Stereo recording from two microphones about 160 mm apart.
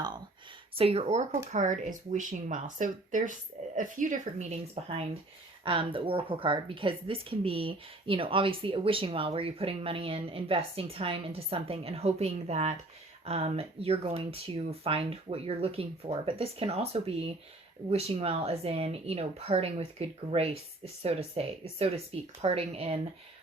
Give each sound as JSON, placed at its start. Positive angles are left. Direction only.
{"t": 0.8, "sound": "a woman's voice", "side_deg": -40}